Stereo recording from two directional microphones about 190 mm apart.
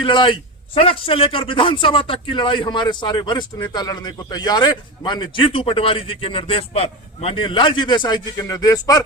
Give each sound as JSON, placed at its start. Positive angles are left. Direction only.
{"t": 0.0, "sound": "a man's voice", "side_deg": 25}